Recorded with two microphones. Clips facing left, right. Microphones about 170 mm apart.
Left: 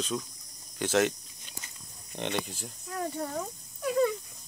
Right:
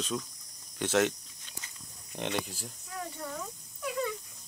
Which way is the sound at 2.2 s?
5° right (ahead or behind).